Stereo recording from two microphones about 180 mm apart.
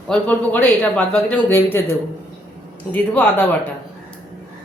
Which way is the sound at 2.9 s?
10° left (ahead or behind).